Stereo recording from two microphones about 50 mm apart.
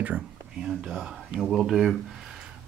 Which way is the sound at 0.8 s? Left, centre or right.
Centre.